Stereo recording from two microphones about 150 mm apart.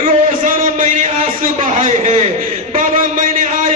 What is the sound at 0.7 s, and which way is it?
A man's voice, 55° right (ahead or behind).